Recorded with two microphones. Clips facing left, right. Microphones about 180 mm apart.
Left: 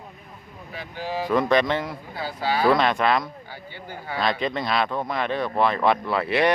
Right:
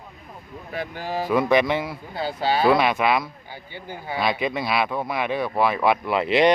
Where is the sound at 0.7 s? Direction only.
50° right (ahead or behind).